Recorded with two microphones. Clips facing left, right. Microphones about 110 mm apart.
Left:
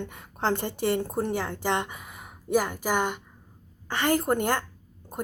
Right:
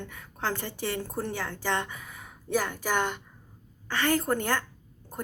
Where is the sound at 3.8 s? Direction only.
20° left (ahead or behind).